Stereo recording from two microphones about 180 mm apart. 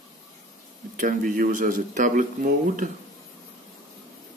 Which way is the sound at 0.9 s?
50° right (ahead or behind).